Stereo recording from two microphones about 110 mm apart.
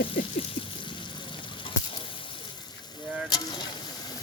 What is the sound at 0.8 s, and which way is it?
Frying, 45° left (ahead or behind).